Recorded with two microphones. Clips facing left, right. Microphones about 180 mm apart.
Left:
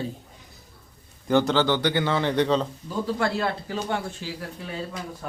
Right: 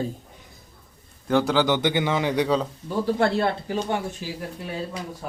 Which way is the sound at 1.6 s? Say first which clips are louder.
Right 1 dB; 15° right (ahead or behind).